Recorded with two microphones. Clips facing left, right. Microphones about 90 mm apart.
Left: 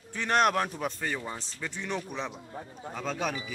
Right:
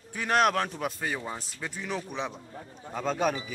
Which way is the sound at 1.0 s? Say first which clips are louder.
Right 1 dB; 10° right (ahead or behind).